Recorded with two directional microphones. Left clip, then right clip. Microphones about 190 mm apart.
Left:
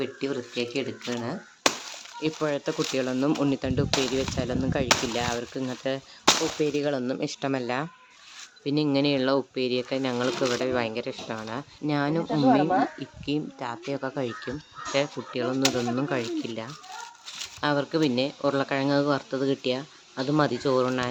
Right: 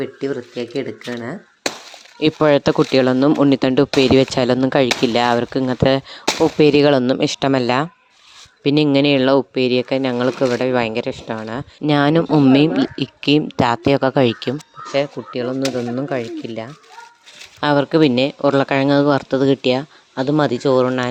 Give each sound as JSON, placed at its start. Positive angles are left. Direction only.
{"t": 0.0, "sound": "speech", "side_deg": -15}
{"t": 2.2, "sound": "speech", "side_deg": -50}
{"t": 14.9, "sound": "speech", "side_deg": -25}
{"t": 17.6, "sound": "speech", "side_deg": -40}